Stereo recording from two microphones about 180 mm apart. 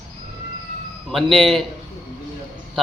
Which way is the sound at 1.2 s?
30° right (ahead or behind).